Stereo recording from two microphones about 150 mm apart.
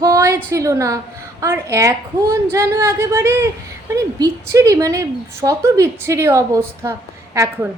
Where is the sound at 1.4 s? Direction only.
15° right (ahead or behind).